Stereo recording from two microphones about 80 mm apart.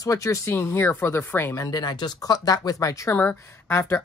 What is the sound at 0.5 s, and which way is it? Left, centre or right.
Speech, left.